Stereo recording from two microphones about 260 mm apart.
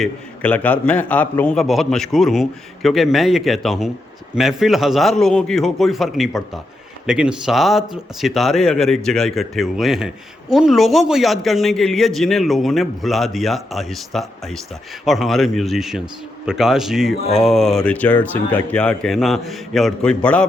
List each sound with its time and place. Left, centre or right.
0.0 s a man's voice: centre